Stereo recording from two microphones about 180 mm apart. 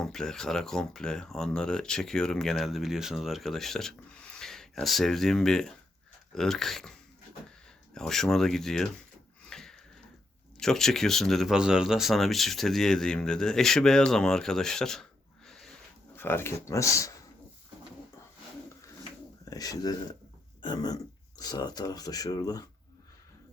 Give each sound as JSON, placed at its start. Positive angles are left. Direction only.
{"t": 0.0, "sound": "speech", "side_deg": 5}
{"t": 7.9, "sound": "speech", "side_deg": 0}
{"t": 9.5, "sound": "a sound", "side_deg": 5}
{"t": 10.6, "sound": "speech", "side_deg": 0}
{"t": 15.4, "sound": "a sound", "side_deg": 0}
{"t": 16.1, "sound": "speech", "side_deg": 10}
{"t": 19.5, "sound": "speech", "side_deg": 20}